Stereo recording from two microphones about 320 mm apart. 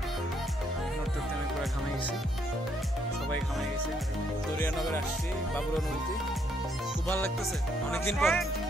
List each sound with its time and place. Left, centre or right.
7.9 s speech: centre